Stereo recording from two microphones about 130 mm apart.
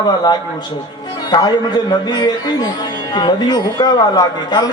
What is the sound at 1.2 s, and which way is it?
Speech, 35° left (ahead or behind).